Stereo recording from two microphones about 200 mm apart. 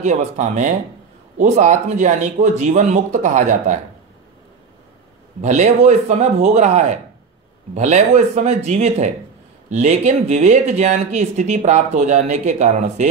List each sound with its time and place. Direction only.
0.0 s speech: 35° right (ahead or behind)
5.4 s speech: 35° right (ahead or behind)